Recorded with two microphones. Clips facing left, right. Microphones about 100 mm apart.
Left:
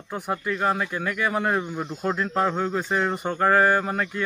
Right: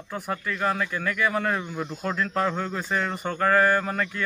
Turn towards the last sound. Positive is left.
turn(degrees=15)  # may be behind; listen again after turning